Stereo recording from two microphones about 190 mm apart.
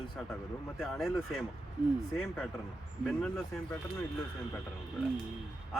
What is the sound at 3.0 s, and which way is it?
Speech, centre (ahead or behind).